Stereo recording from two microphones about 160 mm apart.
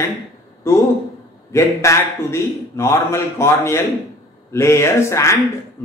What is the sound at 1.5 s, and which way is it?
A man's voice, 15° left (ahead or behind).